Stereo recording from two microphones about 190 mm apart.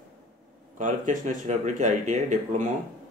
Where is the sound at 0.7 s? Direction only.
40° right (ahead or behind).